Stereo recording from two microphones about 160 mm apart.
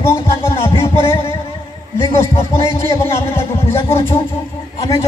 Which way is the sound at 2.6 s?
15° left (ahead or behind).